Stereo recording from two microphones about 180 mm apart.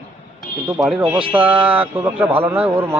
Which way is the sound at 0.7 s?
5° right (ahead or behind).